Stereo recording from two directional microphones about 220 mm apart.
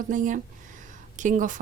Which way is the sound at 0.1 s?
35° right (ahead or behind).